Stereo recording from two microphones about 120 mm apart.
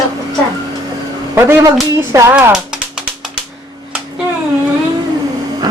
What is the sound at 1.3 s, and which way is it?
Speech, 20° right (ahead or behind).